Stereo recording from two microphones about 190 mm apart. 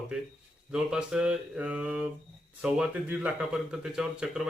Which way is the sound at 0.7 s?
5° right (ahead or behind).